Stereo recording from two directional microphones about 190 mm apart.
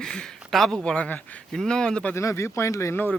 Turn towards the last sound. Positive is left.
turn(degrees=10)  # may be behind; listen again after turning